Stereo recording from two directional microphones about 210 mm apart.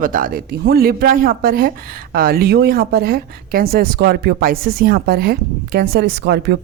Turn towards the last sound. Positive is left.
turn(degrees=-55)  # may be behind; listen again after turning